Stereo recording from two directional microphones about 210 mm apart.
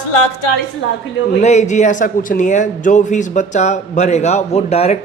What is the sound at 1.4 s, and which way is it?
A man's voice, 30° left (ahead or behind).